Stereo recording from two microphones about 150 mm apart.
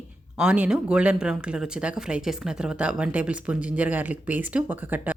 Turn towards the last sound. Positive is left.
turn(degrees=-10)  # may be behind; listen again after turning